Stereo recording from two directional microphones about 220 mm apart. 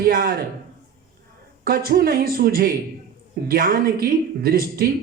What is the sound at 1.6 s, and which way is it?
A woman's voice, 40° right (ahead or behind).